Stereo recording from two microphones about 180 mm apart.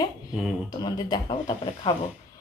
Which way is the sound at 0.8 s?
20° left (ahead or behind).